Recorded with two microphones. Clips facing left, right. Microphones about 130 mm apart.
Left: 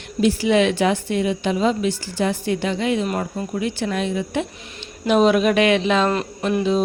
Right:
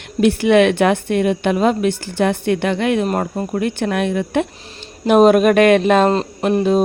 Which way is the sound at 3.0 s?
50° right (ahead or behind).